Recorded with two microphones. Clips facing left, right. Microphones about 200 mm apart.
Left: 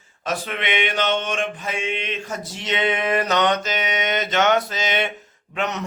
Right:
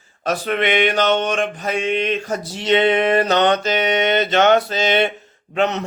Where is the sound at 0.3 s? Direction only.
40° right (ahead or behind).